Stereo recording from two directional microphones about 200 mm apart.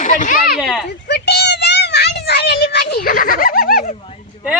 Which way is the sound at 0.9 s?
55° left (ahead or behind).